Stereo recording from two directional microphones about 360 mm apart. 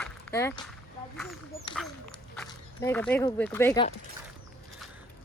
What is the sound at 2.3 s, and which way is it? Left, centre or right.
Speech, centre.